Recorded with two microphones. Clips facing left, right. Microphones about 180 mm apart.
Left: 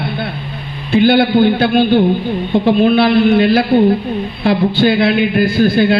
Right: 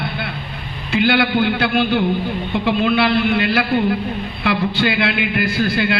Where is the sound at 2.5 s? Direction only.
40° left (ahead or behind).